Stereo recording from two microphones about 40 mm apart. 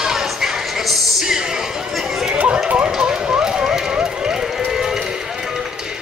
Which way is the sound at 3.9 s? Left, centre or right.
Centre.